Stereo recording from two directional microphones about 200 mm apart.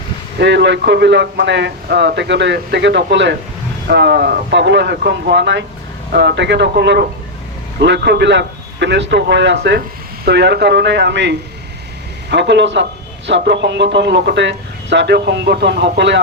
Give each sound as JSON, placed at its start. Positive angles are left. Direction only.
{"t": 0.3, "sound": "a man's voice", "side_deg": -60}